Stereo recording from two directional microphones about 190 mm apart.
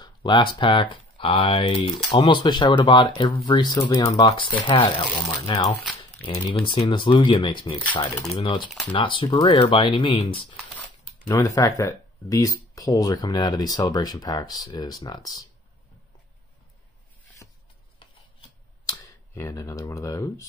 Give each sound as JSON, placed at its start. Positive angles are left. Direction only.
{"t": 0.0, "sound": "speech", "side_deg": 25}
{"t": 11.2, "sound": "speech", "side_deg": 15}
{"t": 17.4, "sound": "a sound", "side_deg": 15}
{"t": 18.9, "sound": "speech", "side_deg": 15}